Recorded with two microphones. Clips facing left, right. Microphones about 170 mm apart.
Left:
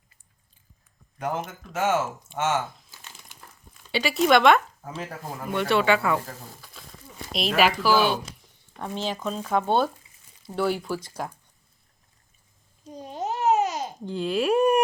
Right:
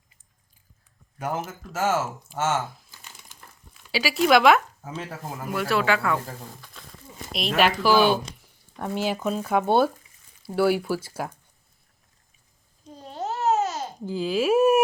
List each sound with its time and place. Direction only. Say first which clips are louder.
1.2 s speech: even; 5° right (ahead or behind)
3.9 s speech: even; centre (ahead or behind)
6.8 s a sound: even; 5° left (ahead or behind)
7.3 s speech: even; centre (ahead or behind)
8.8 s speech: right 3 dB; 10° right (ahead or behind)
12.9 s babbling: left 1 dB; 15° left (ahead or behind)
14.0 s speech: right 1 dB; 5° right (ahead or behind)